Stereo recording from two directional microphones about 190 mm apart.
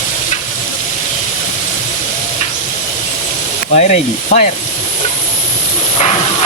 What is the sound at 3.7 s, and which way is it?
Sizzle, 40° left (ahead or behind).